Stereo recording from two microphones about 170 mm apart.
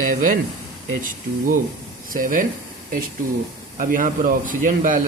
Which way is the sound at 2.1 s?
55° right (ahead or behind).